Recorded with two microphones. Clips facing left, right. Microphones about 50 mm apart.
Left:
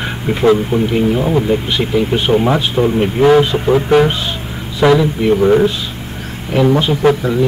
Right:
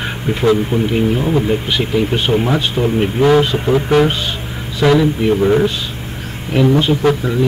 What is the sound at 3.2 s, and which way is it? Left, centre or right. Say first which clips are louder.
Speech: left 2 dB; centre.